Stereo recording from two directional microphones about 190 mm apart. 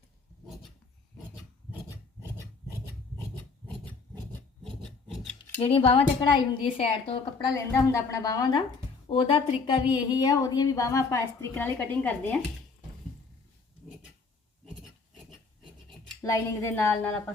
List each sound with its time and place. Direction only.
0.4 s a sound: centre (ahead or behind)
5.5 s a woman's voice: 30° left (ahead or behind)
7.5 s a woman's voice: 15° left (ahead or behind)
16.2 s a woman's voice: 15° left (ahead or behind)